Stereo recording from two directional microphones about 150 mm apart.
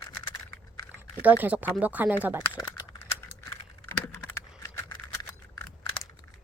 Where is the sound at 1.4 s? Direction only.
10° right (ahead or behind).